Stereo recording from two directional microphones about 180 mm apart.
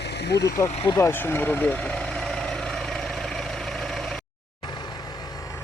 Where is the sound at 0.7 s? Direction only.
25° left (ahead or behind).